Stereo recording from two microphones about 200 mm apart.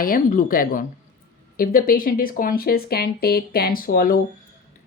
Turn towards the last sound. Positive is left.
turn(degrees=45)  # may be behind; listen again after turning